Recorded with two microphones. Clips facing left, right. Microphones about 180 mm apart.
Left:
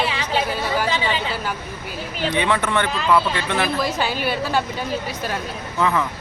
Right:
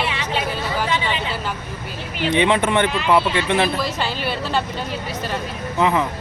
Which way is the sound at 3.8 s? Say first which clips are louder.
Left 2 dB; 10° left (ahead or behind).